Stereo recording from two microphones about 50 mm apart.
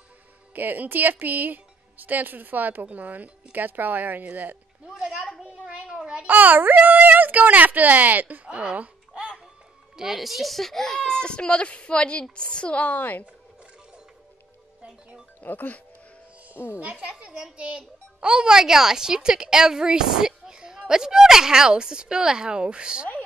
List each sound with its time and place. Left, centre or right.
0.6 s a woman's voice: right
4.8 s a sound: centre
5.9 s babbling: centre
6.2 s a woman's voice: right
8.5 s speech: centre
8.7 s babbling: right
9.9 s a child's voice: centre
12.8 s a woman's voice: left
15.4 s a woman's voice: left
16.5 s a child's voice: left
17.3 s a child's voice: centre